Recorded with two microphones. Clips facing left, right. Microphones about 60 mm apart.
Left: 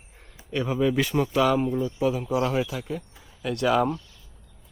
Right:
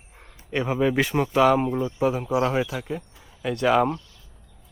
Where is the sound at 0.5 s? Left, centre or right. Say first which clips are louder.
Right 1 dB; right.